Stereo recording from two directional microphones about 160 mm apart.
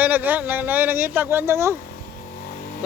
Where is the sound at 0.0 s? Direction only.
10° right (ahead or behind).